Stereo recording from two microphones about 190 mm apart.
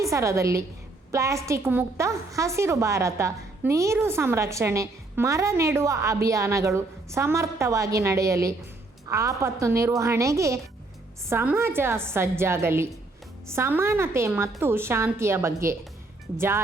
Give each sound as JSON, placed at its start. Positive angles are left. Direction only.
{"t": 0.0, "sound": "a woman's voice", "side_deg": -15}